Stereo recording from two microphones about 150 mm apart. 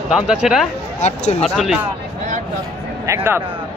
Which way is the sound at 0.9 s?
50° left (ahead or behind).